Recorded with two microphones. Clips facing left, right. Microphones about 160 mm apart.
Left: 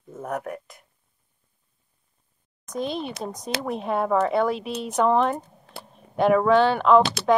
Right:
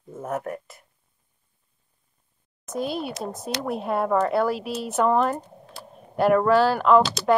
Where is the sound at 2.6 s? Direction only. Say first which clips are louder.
Right 1 dB; 5° right (ahead or behind).